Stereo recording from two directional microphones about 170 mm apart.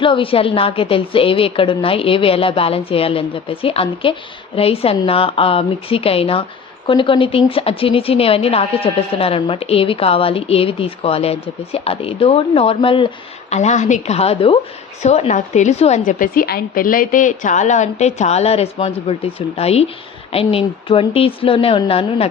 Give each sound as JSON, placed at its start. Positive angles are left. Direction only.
{"t": 0.0, "sound": "a woman's voice", "side_deg": 30}
{"t": 13.5, "sound": "a woman's voice", "side_deg": 40}